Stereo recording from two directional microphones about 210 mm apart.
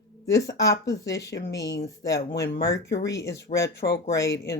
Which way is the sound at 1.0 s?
15° left (ahead or behind).